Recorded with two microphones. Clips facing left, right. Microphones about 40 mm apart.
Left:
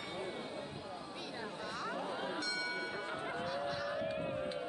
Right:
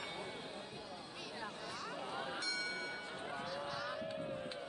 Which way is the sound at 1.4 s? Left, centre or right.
Left.